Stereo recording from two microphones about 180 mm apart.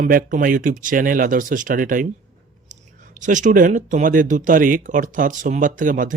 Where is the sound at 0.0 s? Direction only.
50° right (ahead or behind).